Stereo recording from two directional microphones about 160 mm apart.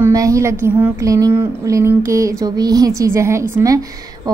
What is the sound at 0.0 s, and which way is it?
A woman's voice, 20° right (ahead or behind).